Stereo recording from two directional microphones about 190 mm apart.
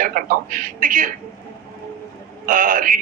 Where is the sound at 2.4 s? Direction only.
45° right (ahead or behind).